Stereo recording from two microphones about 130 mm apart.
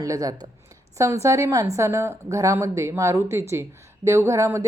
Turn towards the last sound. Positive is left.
turn(degrees=-20)  # may be behind; listen again after turning